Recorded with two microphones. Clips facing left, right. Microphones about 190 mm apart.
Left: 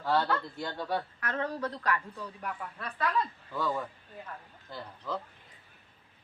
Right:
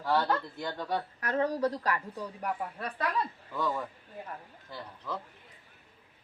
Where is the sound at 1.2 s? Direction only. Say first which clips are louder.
Right 5 dB; 40° right (ahead or behind).